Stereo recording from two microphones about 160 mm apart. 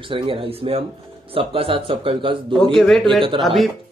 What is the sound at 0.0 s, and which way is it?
A woman's voice, 35° right (ahead or behind).